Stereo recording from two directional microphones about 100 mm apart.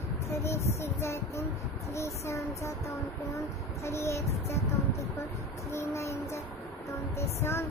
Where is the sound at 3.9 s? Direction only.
30° left (ahead or behind).